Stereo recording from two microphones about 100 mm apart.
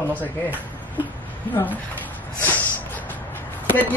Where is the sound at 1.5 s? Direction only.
15° left (ahead or behind).